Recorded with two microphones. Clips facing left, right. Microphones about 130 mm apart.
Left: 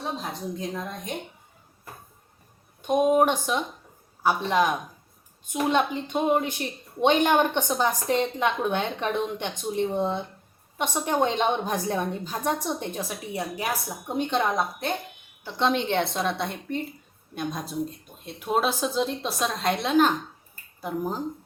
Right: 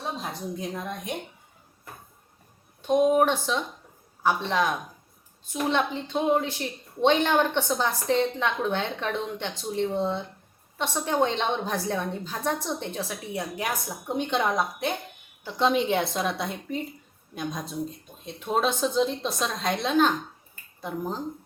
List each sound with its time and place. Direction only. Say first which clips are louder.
0.7 s a woman's voice: even; 10° right (ahead or behind)
2.8 s a woman's voice: even; 15° left (ahead or behind)